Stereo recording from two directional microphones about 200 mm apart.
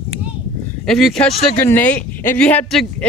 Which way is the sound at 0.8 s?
Centre (ahead or behind).